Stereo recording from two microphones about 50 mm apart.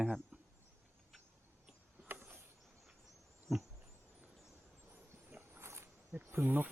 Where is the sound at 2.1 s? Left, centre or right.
Right.